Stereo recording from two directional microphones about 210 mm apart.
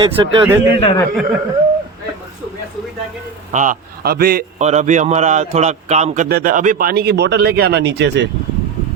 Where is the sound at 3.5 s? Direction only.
40° right (ahead or behind).